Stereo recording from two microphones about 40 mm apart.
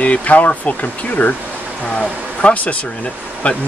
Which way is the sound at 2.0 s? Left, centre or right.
Left.